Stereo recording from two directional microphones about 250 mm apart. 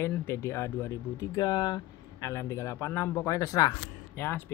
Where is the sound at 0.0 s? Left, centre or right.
Centre.